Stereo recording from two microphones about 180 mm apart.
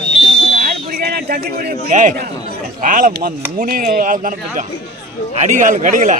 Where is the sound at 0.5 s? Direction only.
60° right (ahead or behind).